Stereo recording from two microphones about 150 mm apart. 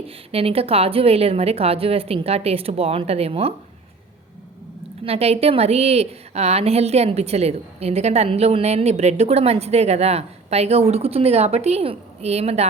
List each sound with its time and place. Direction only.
0.3 s a woman's voice: 40° right (ahead or behind)
5.0 s a woman's voice: 40° right (ahead or behind)